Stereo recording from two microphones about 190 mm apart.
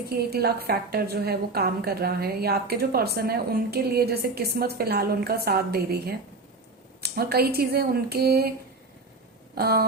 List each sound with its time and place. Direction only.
0.1 s a woman's voice: 55° right (ahead or behind)
9.6 s a woman's voice: 55° right (ahead or behind)